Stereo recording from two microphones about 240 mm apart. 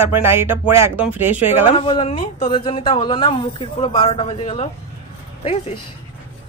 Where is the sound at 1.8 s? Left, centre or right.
Left.